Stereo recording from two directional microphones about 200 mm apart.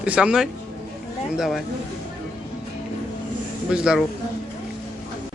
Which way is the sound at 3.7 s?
5° right (ahead or behind).